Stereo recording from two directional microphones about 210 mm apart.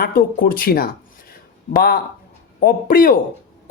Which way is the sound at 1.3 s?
45° left (ahead or behind).